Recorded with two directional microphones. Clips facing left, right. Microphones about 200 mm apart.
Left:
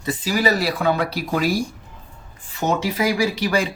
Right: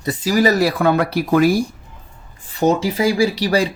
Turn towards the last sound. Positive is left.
turn(degrees=-35)  # may be behind; listen again after turning